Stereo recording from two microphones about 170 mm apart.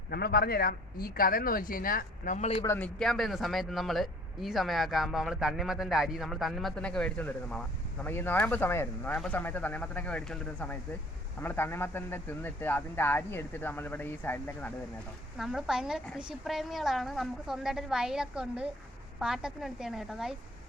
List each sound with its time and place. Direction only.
0.1 s speech: 65° left (ahead or behind)
2.6 s a man's voice: 10° left (ahead or behind)
15.4 s a man's voice: centre (ahead or behind)